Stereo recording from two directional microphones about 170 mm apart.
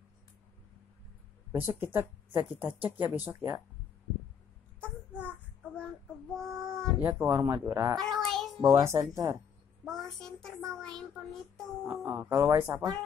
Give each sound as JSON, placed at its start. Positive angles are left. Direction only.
{"t": 1.5, "sound": "speech", "side_deg": -10}
{"t": 4.7, "sound": "child singing", "side_deg": 10}
{"t": 6.3, "sound": "child singing", "side_deg": 5}
{"t": 7.0, "sound": "speech", "side_deg": -10}
{"t": 8.0, "sound": "a sound", "side_deg": 0}
{"t": 8.6, "sound": "speech", "side_deg": -20}
{"t": 9.8, "sound": "a child's voice", "side_deg": 0}
{"t": 10.7, "sound": "child singing", "side_deg": 5}
{"t": 11.8, "sound": "speech", "side_deg": -15}